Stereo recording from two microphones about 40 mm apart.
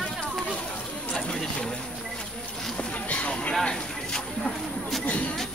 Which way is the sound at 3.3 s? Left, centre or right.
Left.